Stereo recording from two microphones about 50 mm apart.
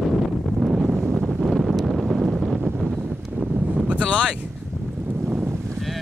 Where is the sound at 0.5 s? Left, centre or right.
Centre.